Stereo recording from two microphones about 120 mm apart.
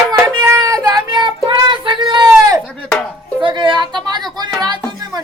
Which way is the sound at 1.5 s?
40° right (ahead or behind).